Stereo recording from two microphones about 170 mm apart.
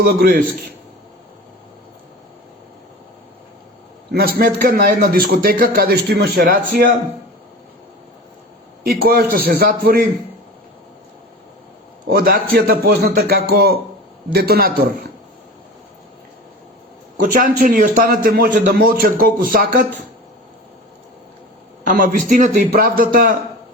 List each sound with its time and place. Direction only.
0.0 s a man's voice: 65° right (ahead or behind)
4.1 s a man's voice: 60° right (ahead or behind)
8.8 s a man's voice: 60° right (ahead or behind)
12.0 s a man's voice: 60° right (ahead or behind)
17.3 s a man's voice: 50° right (ahead or behind)
21.8 s a man's voice: 55° right (ahead or behind)